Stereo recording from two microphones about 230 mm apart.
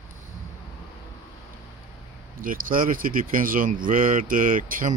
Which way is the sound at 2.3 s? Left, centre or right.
Right.